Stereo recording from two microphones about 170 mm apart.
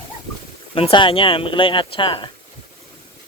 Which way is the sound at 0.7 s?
30° left (ahead or behind).